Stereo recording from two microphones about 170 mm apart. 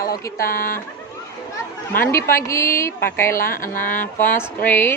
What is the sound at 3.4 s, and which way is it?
Speech, 55° left (ahead or behind).